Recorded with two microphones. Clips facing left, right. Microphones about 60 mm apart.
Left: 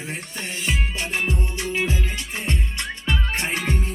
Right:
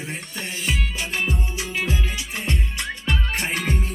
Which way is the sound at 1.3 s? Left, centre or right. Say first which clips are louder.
Left 2 dB; centre.